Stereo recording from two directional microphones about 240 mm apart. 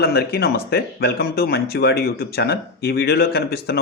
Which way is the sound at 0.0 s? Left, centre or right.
Left.